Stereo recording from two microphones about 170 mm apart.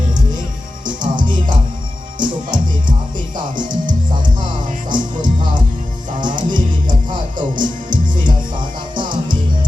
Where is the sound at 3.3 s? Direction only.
25° right (ahead or behind).